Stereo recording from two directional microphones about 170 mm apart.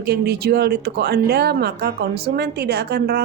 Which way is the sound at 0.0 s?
70° right (ahead or behind).